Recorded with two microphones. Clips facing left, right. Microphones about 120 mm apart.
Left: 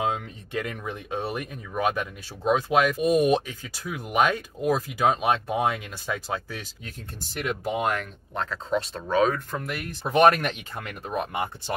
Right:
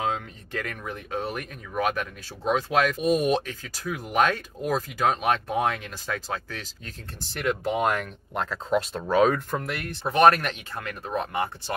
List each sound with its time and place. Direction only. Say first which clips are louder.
0.0 s speech: left 1 dB; 15° left (ahead or behind)
7.7 s speech: right 2 dB; centre (ahead or behind)
9.8 s speech: left 2 dB; 15° left (ahead or behind)